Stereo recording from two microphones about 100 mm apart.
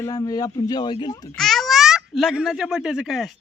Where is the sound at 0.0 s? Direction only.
35° left (ahead or behind).